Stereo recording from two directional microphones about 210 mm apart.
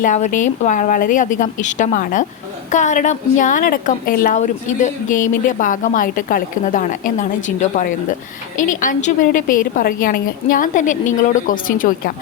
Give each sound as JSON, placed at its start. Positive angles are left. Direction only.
{"t": 0.0, "sound": "a woman's voice", "side_deg": 35}